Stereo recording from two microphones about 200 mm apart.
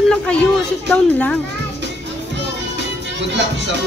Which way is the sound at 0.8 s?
5° left (ahead or behind).